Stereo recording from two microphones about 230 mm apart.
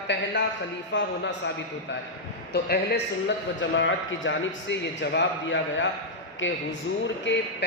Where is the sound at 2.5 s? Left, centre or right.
Left.